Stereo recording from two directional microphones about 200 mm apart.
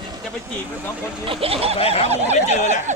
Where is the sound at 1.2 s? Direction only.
25° right (ahead or behind).